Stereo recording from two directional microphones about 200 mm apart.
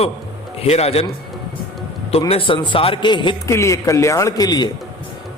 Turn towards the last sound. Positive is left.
turn(degrees=20)  # may be behind; listen again after turning